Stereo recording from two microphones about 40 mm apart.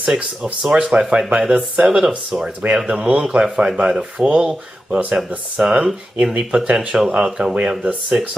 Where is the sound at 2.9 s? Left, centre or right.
Right.